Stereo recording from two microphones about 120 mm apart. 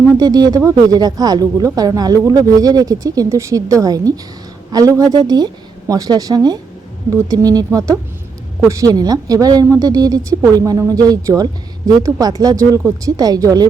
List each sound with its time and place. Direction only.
0.2 s speech: 35° right (ahead or behind)